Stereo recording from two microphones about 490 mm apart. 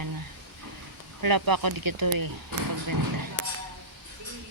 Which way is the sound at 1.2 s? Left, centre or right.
Right.